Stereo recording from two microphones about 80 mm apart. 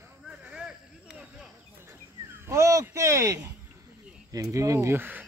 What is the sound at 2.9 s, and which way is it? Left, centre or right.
Speech, right.